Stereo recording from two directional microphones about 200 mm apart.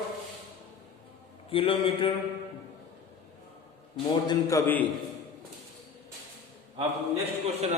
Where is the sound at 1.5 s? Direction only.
25° left (ahead or behind).